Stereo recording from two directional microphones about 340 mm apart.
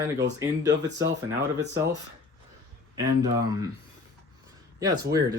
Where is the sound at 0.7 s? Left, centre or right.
Right.